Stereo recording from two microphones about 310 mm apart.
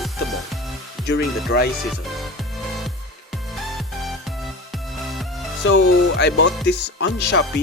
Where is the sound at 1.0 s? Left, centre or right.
Left.